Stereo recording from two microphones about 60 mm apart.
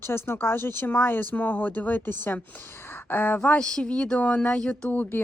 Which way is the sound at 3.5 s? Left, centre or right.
Centre.